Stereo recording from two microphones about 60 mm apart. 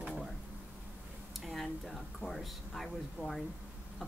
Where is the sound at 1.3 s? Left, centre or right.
Centre.